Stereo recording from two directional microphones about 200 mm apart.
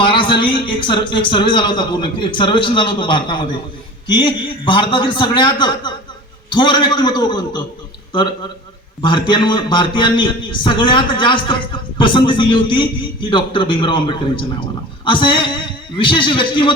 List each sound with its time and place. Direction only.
0.0 s a man's voice: 25° left (ahead or behind)
9.0 s a man's voice: 25° left (ahead or behind)